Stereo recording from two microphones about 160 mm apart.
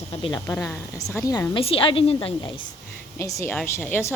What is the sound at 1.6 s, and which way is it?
Speech, 35° left (ahead or behind).